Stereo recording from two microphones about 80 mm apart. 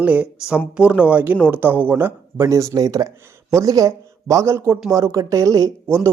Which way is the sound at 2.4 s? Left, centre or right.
Right.